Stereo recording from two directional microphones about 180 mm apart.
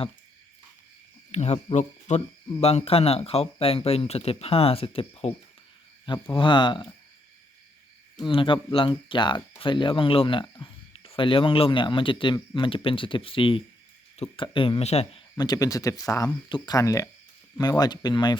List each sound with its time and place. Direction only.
1.3 s speech: 40° left (ahead or behind)
6.3 s speech: 25° left (ahead or behind)
8.2 s speech: 25° left (ahead or behind)
15.4 s speech: 20° left (ahead or behind)